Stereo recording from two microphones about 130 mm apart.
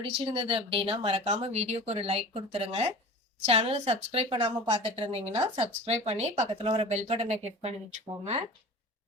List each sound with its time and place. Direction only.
0.0 s a woman's voice: 40° right (ahead or behind); by 6.5 s 60° right (ahead or behind)
6.6 s speech: 45° right (ahead or behind)